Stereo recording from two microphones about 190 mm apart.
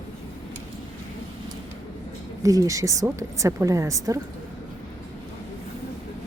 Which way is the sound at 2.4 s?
15° right (ahead or behind).